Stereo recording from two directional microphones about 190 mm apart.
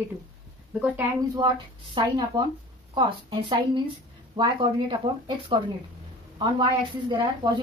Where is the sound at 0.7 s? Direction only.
10° right (ahead or behind).